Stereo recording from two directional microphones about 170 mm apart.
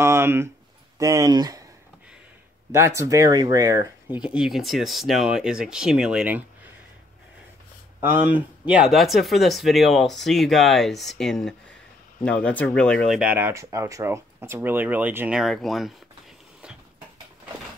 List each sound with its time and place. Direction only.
0.0 s a sound: 15° right (ahead or behind)
0.9 s speech: 20° right (ahead or behind)
2.7 s speech: 15° right (ahead or behind)
4.2 s speech: 5° right (ahead or behind)
8.0 s speech: 10° right (ahead or behind); by 13.2 s 5° left (ahead or behind)
13.2 s speech: 10° right (ahead or behind)
16.6 s a sound: 5° right (ahead or behind)